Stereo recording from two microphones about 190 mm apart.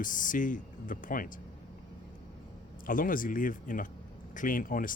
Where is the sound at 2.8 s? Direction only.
45° left (ahead or behind).